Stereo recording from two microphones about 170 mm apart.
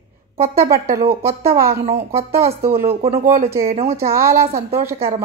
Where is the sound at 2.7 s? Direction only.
60° right (ahead or behind).